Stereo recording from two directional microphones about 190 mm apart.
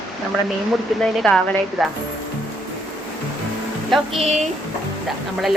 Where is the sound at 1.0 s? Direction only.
Centre (ahead or behind).